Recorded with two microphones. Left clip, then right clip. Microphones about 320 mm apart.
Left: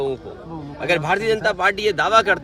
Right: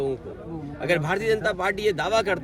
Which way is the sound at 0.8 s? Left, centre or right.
Centre.